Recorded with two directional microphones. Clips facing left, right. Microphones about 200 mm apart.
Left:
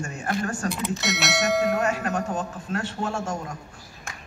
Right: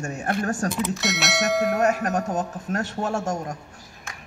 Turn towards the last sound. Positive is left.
turn(degrees=-45)  # may be behind; listen again after turning